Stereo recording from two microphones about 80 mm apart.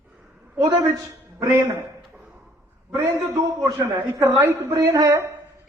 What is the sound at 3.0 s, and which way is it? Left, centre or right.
A man's voice, right.